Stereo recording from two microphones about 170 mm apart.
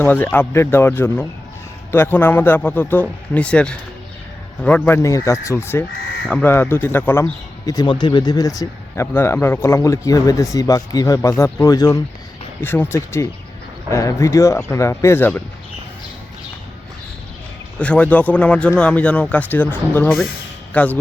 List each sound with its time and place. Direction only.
0.0 s speech: 10° left (ahead or behind)
17.7 s speech: 5° left (ahead or behind)